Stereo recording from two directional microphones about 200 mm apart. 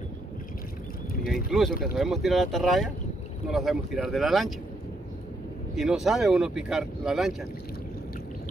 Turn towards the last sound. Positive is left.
turn(degrees=0)  # may be behind; listen again after turning